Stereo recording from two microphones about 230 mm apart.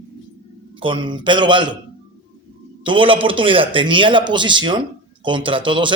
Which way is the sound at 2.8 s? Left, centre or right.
Right.